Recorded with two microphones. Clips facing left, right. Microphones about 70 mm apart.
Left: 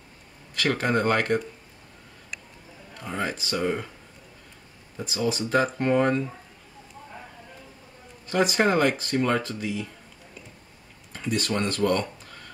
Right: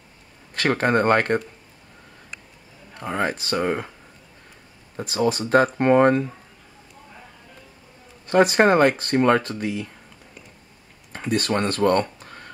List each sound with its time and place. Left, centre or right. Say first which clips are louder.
0.6 s speech: right 4 dB; right
3.0 s speech: right 5 dB; right
4.9 s speech: right 5 dB; right
8.3 s speech: right 6 dB; right
11.1 s speech: right 4 dB; right
12.3 s a sound: right 4 dB; right